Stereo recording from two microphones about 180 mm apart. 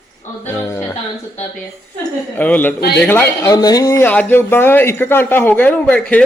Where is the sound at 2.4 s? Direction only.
10° left (ahead or behind).